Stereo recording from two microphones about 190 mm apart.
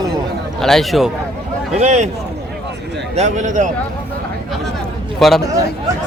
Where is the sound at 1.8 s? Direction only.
35° right (ahead or behind).